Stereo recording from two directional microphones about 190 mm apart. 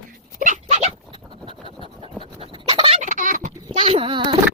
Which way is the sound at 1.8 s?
30° right (ahead or behind).